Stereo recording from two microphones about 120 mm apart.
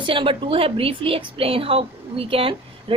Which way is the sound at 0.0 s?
45° right (ahead or behind).